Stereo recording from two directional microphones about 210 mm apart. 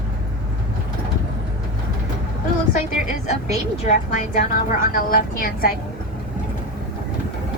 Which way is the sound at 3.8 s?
35° left (ahead or behind).